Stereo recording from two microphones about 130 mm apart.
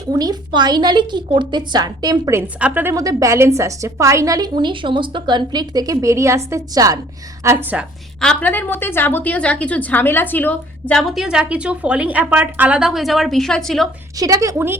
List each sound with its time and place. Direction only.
0.1 s a woman's voice: 30° right (ahead or behind)
2.6 s a woman's voice: 10° right (ahead or behind)
2.9 s a woman's voice: 25° right (ahead or behind)
8.2 s a woman's voice: 10° left (ahead or behind)
11.1 s a woman's voice: 5° right (ahead or behind)
14.2 s a woman's voice: 25° right (ahead or behind)